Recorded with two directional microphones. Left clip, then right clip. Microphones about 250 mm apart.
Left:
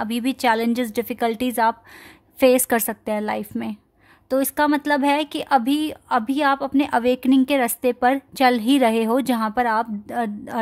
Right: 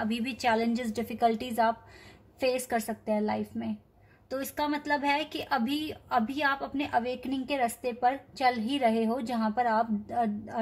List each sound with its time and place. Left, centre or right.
0.0 s a woman's voice: left